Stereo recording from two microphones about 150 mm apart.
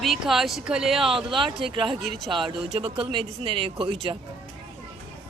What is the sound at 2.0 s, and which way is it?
Speech, centre (ahead or behind).